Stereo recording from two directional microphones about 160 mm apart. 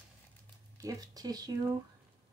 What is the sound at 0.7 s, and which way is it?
Speech, 25° right (ahead or behind).